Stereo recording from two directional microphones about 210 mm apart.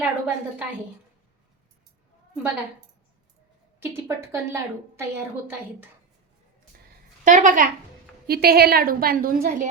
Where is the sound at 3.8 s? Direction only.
10° right (ahead or behind).